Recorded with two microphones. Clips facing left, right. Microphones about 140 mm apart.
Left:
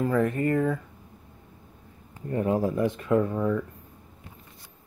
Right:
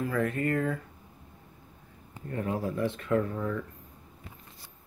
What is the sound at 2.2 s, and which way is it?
Speech, 25° left (ahead or behind).